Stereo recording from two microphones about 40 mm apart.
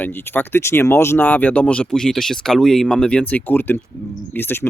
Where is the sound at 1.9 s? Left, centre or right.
Centre.